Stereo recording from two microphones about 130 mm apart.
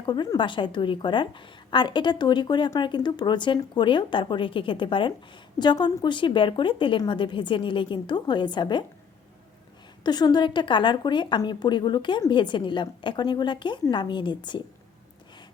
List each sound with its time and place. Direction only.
0.0 s a woman's voice: 35° left (ahead or behind)
10.0 s a woman's voice: 30° left (ahead or behind)